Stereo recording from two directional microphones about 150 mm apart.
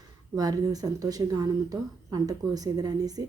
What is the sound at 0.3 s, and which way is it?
Speech, 25° right (ahead or behind).